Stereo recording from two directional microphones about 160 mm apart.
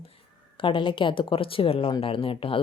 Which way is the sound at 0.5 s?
30° left (ahead or behind).